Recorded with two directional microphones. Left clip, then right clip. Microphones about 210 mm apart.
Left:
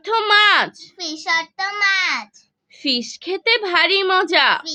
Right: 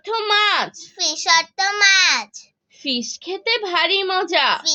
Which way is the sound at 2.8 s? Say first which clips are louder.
Left 2 dB; 25° left (ahead or behind).